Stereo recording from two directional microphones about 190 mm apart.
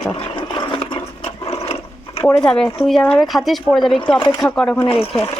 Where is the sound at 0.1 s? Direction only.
25° left (ahead or behind).